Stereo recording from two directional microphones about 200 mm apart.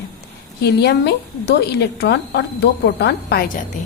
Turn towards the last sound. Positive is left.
turn(degrees=50)  # may be behind; listen again after turning